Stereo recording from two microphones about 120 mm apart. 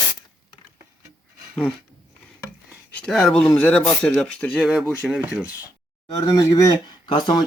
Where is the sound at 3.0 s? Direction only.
5° left (ahead or behind).